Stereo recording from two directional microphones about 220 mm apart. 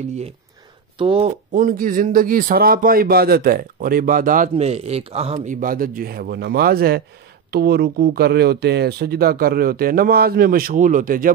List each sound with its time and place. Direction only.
0.9 s speech: 25° right (ahead or behind)